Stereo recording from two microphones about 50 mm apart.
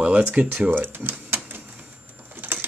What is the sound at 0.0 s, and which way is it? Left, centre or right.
Cash register, right.